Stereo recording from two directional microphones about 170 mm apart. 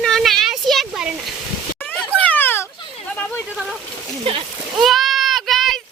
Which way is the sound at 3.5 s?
Centre (ahead or behind).